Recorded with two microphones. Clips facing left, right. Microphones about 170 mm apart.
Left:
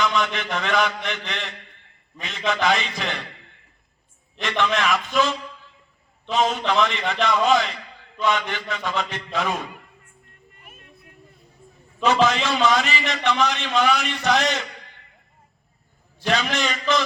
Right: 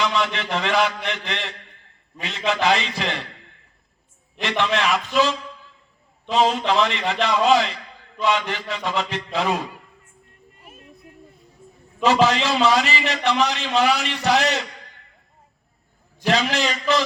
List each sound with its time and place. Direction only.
0.1 s a man's voice: 30° right (ahead or behind)
4.4 s a man's voice: 30° right (ahead or behind)
6.3 s a man's voice: 30° right (ahead or behind)
10.6 s music: 30° right (ahead or behind)
12.0 s a man's voice: 35° right (ahead or behind)
16.2 s a man's voice: 35° right (ahead or behind)